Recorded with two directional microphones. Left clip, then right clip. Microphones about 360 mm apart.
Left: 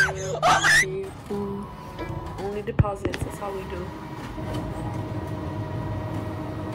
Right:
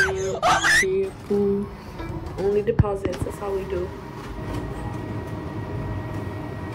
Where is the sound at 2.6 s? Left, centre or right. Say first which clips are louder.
Right 4 dB; left.